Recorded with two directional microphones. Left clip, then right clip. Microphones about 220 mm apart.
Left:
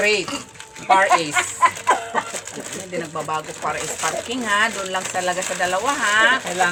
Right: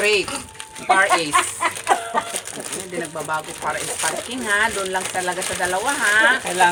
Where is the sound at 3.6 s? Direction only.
30° left (ahead or behind).